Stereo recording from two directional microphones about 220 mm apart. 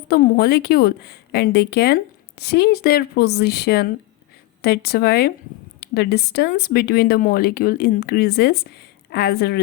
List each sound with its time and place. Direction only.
0.1 s speech: 45° left (ahead or behind)